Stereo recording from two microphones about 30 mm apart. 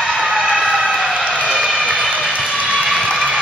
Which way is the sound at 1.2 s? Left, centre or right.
Right.